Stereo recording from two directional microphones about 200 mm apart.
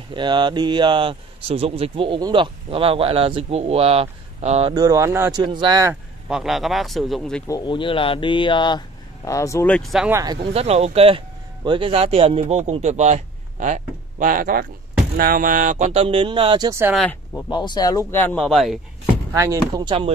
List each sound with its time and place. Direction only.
0.1 s speech: 20° right (ahead or behind)
4.7 s speech: 15° right (ahead or behind)
6.2 s a man's voice: centre (ahead or behind)
7.4 s speech: 20° left (ahead or behind)
9.8 s a man's voice: centre (ahead or behind)
10.1 s speech: 20° right (ahead or behind)
17.5 s speech: 20° left (ahead or behind); by 18.8 s centre (ahead or behind)
19.3 s speech: 15° right (ahead or behind)